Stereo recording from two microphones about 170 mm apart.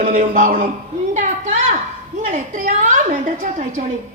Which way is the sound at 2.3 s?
50° right (ahead or behind).